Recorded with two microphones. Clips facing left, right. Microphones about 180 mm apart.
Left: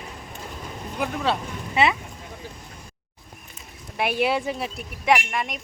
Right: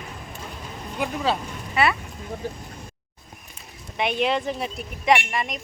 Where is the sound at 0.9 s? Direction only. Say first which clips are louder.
Even; centre (ahead or behind).